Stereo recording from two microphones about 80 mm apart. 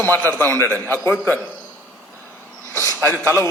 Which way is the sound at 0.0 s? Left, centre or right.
Left.